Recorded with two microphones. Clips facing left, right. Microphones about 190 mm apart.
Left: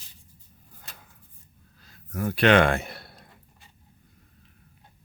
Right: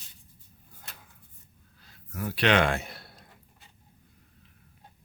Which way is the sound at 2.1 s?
50° left (ahead or behind).